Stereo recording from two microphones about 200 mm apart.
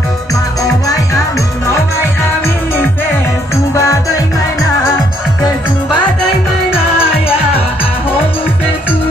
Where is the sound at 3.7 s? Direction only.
15° left (ahead or behind).